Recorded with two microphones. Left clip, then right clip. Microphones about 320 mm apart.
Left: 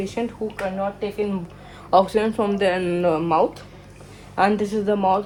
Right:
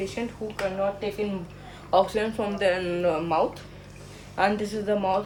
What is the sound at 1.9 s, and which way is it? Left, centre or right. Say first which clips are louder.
Speech: left 5 dB; centre.